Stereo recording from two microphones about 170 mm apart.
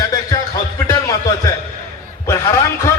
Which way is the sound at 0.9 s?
20° left (ahead or behind).